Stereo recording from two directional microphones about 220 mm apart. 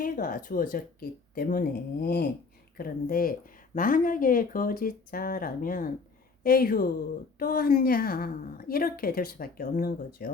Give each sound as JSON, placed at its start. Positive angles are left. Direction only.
{"t": 0.0, "sound": "a woman's voice", "side_deg": 40}